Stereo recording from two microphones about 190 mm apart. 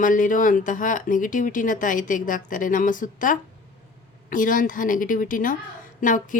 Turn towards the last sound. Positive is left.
turn(degrees=45)  # may be behind; listen again after turning